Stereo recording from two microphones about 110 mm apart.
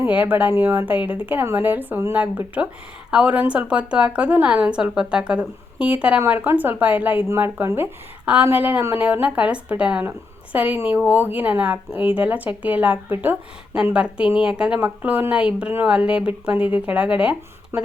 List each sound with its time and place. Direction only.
0.0 s a woman's voice: 15° right (ahead or behind)
17.7 s a woman's voice: 25° right (ahead or behind)